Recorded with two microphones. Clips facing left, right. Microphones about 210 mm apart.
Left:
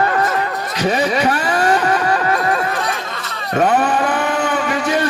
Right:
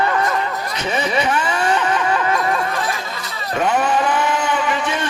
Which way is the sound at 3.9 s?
55° left (ahead or behind).